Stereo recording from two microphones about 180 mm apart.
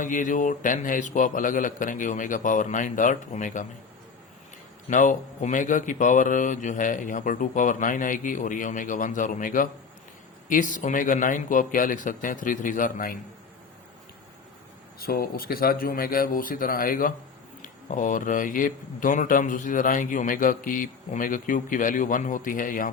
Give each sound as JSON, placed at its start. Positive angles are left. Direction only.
{"t": 0.0, "sound": "speech", "side_deg": 45}
{"t": 4.9, "sound": "speech", "side_deg": 45}
{"t": 14.9, "sound": "speech", "side_deg": 55}